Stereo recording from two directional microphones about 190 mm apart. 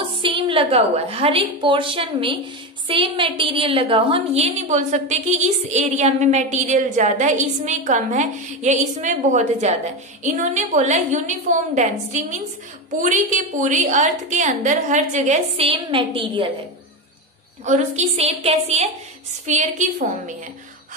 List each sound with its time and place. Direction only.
0.0 s a woman's voice: 25° right (ahead or behind)
17.6 s a woman's voice: 35° right (ahead or behind)